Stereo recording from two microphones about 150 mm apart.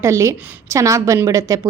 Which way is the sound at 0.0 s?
20° right (ahead or behind).